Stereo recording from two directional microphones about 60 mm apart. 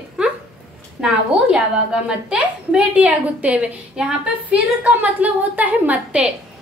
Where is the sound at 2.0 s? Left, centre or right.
Centre.